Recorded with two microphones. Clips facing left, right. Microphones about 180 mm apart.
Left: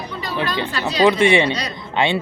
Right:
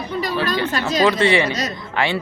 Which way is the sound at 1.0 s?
20° left (ahead or behind).